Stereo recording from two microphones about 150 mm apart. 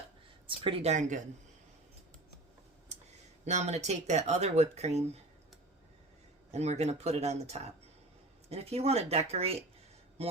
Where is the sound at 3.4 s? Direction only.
50° right (ahead or behind).